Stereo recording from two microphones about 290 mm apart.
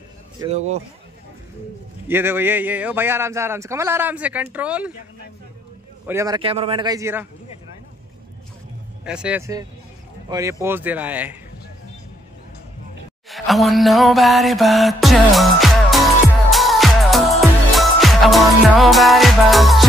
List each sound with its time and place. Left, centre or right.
0.4 s speech: right
2.0 s a man's voice: centre
6.0 s a man's voice: centre
9.0 s speech: centre
13.3 s music: centre